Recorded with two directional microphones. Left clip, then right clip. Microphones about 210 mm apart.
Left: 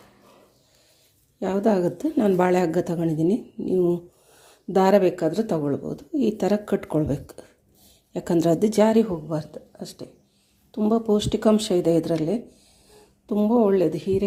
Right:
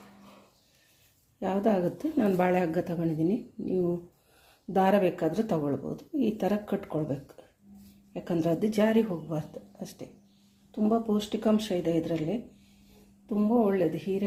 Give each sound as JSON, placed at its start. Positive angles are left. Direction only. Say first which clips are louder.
{"t": 1.4, "sound": "speech", "louder": "left 5 dB", "side_deg": 20}
{"t": 10.7, "sound": "speech", "louder": "left 6 dB", "side_deg": 20}